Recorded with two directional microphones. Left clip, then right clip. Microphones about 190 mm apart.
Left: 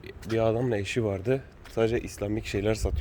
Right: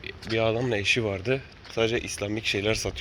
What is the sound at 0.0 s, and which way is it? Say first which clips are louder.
A man's voice: right 1 dB; 30° left (ahead or behind).